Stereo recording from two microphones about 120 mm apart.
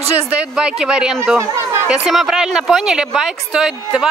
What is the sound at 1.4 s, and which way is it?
Chatter, 25° right (ahead or behind).